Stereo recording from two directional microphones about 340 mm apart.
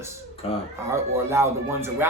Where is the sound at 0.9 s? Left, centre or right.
Centre.